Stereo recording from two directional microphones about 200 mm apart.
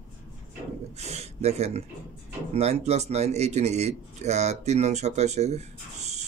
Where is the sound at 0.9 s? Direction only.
35° right (ahead or behind).